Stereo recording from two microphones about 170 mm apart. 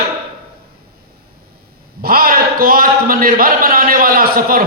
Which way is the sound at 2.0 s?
60° right (ahead or behind).